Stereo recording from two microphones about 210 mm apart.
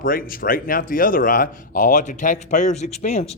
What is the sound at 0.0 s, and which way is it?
A man's voice, 40° left (ahead or behind).